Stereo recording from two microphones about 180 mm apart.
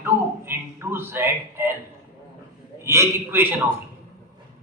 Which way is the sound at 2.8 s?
15° right (ahead or behind).